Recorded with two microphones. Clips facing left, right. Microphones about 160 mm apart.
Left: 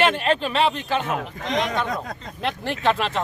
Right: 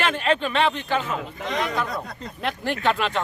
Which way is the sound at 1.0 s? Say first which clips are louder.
Left 2 dB; 65° left (ahead or behind).